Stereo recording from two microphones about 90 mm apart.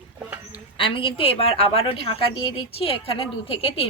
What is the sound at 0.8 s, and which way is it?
A woman's voice, 80° left.